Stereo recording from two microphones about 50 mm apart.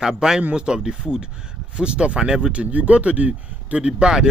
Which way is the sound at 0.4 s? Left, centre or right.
Right.